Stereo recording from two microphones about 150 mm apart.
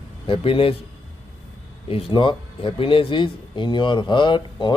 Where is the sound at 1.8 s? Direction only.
35° left (ahead or behind).